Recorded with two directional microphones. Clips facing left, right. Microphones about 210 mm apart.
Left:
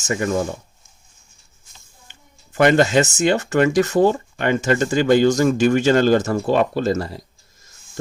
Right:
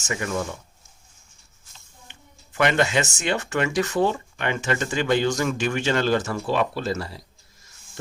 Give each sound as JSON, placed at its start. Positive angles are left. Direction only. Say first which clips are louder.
{"t": 0.1, "sound": "speech", "louder": "left 6 dB", "side_deg": 35}
{"t": 2.0, "sound": "speech", "louder": "right 1 dB", "side_deg": 40}